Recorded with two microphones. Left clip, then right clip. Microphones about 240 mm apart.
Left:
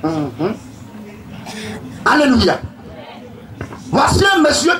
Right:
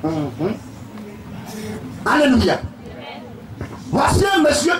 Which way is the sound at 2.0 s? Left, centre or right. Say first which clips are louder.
Left 3 dB; left.